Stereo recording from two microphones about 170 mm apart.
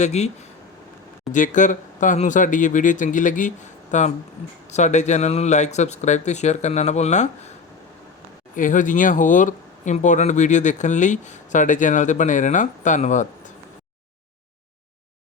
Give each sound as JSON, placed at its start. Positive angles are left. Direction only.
{"t": 0.0, "sound": "speech", "side_deg": 40}
{"t": 1.3, "sound": "speech", "side_deg": 50}
{"t": 8.5, "sound": "speech", "side_deg": 50}